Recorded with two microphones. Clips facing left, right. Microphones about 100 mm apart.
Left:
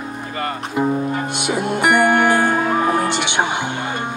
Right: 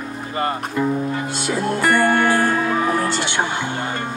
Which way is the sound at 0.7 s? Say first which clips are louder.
Left 5 dB; 20° left (ahead or behind).